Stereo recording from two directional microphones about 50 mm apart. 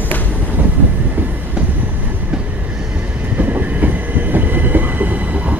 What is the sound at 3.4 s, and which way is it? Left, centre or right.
Train, right.